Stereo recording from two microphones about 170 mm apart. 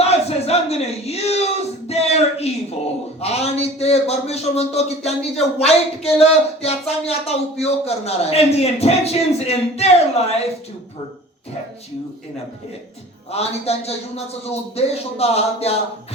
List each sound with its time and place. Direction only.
0.0 s a sound: 40° left (ahead or behind)
3.2 s a man's voice: 40° left (ahead or behind)
13.3 s a man's voice: 40° left (ahead or behind)